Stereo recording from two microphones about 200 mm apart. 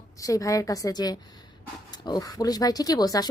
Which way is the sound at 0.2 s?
15° left (ahead or behind).